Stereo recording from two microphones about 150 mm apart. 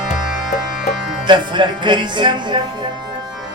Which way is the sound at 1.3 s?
30° right (ahead or behind).